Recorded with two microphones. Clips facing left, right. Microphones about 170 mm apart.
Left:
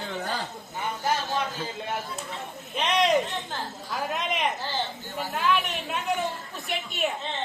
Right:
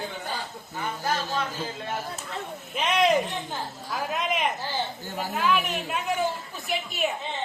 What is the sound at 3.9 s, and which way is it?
A woman's voice, centre (ahead or behind).